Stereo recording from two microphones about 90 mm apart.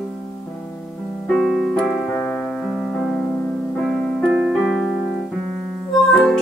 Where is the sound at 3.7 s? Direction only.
Centre (ahead or behind).